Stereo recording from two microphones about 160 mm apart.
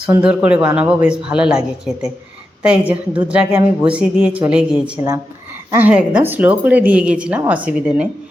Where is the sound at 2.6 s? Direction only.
10° right (ahead or behind).